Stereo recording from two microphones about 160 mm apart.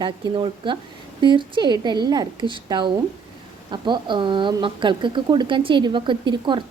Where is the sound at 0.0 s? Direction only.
30° right (ahead or behind).